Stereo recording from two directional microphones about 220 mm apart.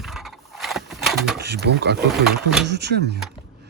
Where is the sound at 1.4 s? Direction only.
50° right (ahead or behind).